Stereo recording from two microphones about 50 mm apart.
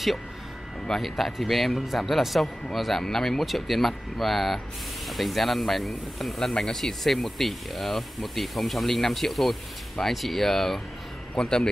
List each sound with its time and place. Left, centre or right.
0.8 s a man's voice: centre